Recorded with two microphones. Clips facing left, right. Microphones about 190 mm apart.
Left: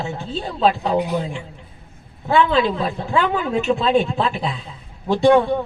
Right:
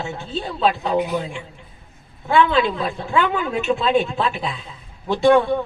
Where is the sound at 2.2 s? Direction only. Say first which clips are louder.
Even; 35° left (ahead or behind).